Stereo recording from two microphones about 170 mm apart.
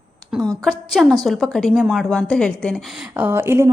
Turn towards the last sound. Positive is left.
turn(degrees=-15)  # may be behind; listen again after turning